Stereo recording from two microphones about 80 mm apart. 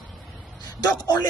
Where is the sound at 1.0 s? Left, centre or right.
Left.